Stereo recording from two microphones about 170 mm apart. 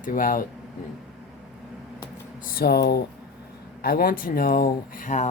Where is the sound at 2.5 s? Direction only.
65° left (ahead or behind).